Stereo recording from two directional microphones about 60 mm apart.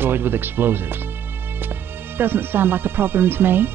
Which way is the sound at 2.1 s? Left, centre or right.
Right.